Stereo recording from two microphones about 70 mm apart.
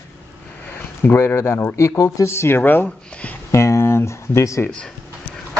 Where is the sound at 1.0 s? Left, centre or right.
Left.